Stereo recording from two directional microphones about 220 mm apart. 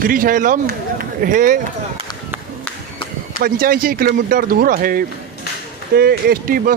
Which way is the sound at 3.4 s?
40° right (ahead or behind).